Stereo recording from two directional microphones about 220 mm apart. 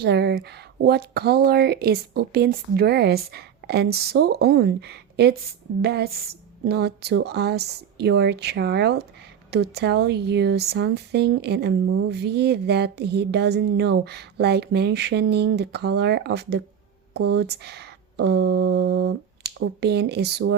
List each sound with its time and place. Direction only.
0.0 s speech: 50° right (ahead or behind)